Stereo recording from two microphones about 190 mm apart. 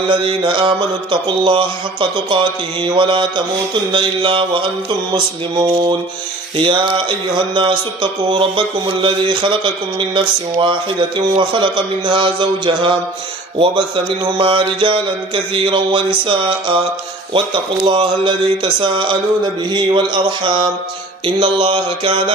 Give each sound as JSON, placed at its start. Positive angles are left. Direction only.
{"t": 0.1, "sound": "speech", "side_deg": -25}
{"t": 6.5, "sound": "speech", "side_deg": -25}
{"t": 17.8, "sound": "speech", "side_deg": -25}